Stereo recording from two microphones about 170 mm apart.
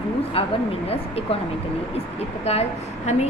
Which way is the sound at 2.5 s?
40° left (ahead or behind).